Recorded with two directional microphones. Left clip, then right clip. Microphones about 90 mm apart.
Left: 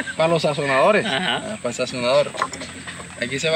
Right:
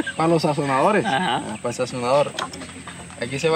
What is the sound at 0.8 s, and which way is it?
Speech, 50° right (ahead or behind).